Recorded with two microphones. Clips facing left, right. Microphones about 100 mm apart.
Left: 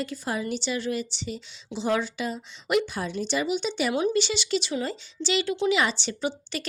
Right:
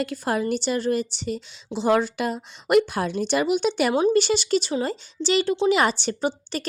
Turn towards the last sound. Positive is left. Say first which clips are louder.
# right 4 dB
turn(degrees=-40)  # may be behind; listen again after turning